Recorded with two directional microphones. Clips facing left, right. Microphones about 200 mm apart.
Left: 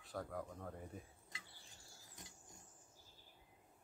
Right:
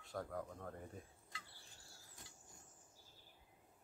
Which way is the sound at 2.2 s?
20° left (ahead or behind).